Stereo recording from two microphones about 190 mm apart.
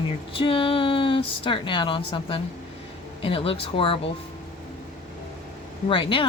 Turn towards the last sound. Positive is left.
turn(degrees=25)  # may be behind; listen again after turning